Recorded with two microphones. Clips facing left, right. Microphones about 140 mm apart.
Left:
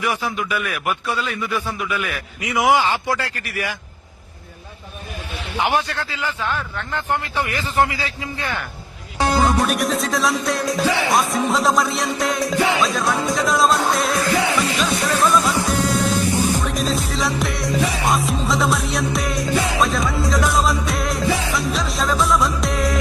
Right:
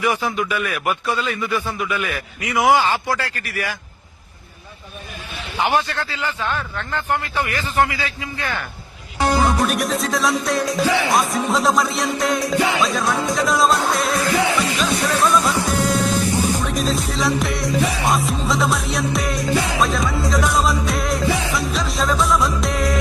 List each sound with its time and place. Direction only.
0.0 s music: 5° left (ahead or behind)
2.6 s a man's voice: 20° right (ahead or behind)
3.2 s a man's voice: 20° left (ahead or behind)
5.5 s speech: 10° left (ahead or behind)
6.2 s speech: 15° right (ahead or behind)
6.6 s speech: 10° left (ahead or behind)
7.8 s a man's voice: 30° left (ahead or behind)
9.4 s music: centre (ahead or behind)